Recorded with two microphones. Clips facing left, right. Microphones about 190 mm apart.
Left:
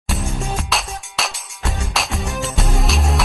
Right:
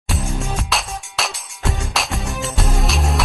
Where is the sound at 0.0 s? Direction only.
Centre (ahead or behind).